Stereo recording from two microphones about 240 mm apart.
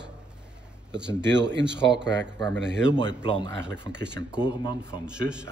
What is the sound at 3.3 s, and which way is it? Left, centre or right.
Speech, centre.